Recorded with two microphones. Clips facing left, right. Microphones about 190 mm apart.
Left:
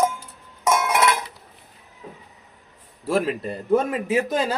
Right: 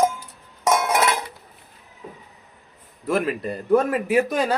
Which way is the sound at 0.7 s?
30° right (ahead or behind).